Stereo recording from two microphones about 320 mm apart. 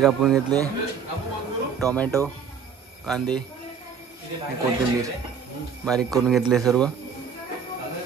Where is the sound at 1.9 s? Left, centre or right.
Centre.